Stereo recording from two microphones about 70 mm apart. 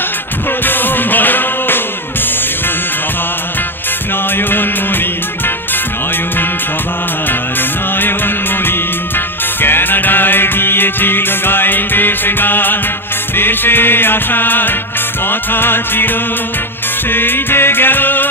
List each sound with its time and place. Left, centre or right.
0.7 s music: left
4.4 s music: left
9.6 s music: left